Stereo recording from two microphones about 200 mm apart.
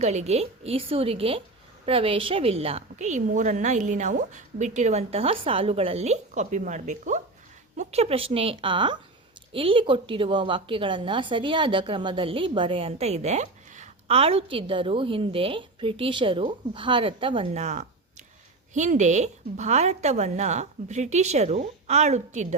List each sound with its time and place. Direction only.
0.0 s a woman's voice: 35° right (ahead or behind)